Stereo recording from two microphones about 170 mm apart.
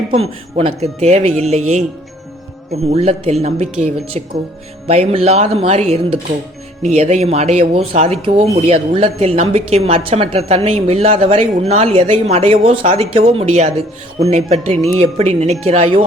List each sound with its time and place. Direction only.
0.1 s speech: 35° right (ahead or behind)
2.9 s speech: 35° right (ahead or behind)